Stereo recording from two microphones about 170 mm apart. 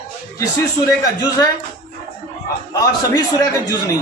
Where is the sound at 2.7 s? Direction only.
20° left (ahead or behind).